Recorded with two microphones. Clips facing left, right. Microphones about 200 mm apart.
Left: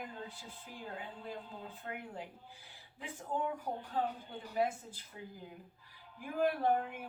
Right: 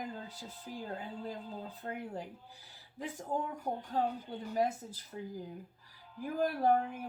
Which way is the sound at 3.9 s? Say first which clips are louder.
Right 3 dB; 40° right (ahead or behind).